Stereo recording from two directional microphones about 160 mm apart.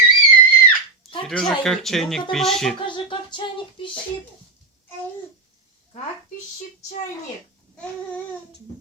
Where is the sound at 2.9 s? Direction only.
30° left (ahead or behind).